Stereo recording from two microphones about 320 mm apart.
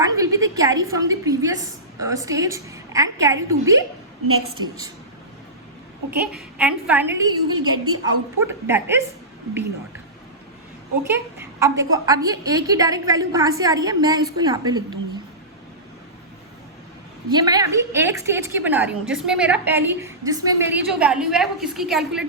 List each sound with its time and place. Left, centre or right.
0.0 s a woman's voice: centre
4.3 s a woman's voice: right
6.1 s a woman's voice: centre
7.3 s a woman's voice: right
8.4 s a woman's voice: centre
11.1 s a woman's voice: centre
17.2 s a woman's voice: centre